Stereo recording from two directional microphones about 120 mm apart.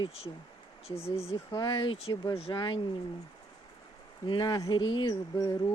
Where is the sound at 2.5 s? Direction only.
40° left (ahead or behind).